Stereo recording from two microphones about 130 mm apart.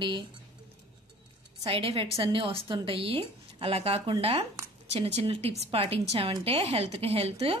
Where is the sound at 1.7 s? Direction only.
45° right (ahead or behind).